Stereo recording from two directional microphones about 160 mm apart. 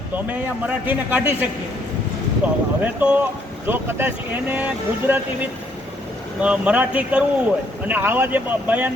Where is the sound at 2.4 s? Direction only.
10° right (ahead or behind).